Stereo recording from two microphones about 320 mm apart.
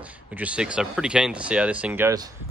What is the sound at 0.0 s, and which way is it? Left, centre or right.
Speech, centre.